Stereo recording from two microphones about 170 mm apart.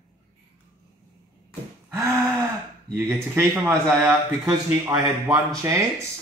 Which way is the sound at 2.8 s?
15° right (ahead or behind).